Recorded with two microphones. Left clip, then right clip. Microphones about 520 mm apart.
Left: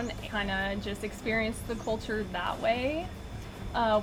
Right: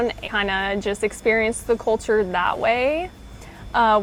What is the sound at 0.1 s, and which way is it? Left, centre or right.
Speech, right.